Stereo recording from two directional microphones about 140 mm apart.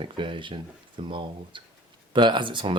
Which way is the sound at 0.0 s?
35° right (ahead or behind).